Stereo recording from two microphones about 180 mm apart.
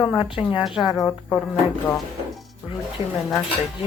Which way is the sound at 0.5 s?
5° right (ahead or behind).